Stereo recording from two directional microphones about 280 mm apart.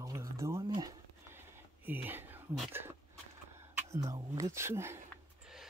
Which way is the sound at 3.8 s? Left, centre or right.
Centre.